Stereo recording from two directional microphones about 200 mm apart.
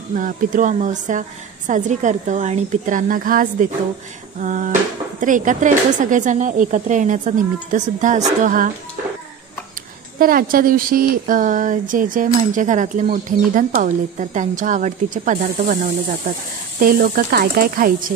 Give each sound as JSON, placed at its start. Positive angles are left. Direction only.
{"t": 0.1, "sound": "a woman's voice", "side_deg": -40}
{"t": 10.1, "sound": "a woman's voice", "side_deg": -45}